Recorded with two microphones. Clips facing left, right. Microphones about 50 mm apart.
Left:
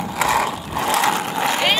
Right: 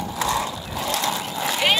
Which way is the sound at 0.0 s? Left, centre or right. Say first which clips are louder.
Left 5 dB; left.